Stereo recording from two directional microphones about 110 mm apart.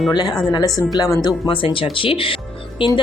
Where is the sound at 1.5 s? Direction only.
55° left (ahead or behind).